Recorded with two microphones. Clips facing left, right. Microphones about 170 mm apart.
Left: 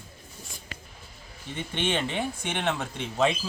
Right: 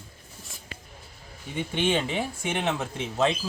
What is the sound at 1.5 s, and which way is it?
Speech, 10° right (ahead or behind).